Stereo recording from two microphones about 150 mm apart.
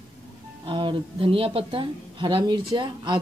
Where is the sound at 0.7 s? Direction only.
35° right (ahead or behind).